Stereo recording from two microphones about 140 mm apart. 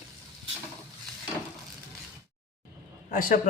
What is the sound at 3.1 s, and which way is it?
Speech, 85° left.